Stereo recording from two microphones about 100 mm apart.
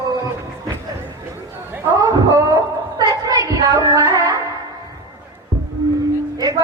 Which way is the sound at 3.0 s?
35° right (ahead or behind).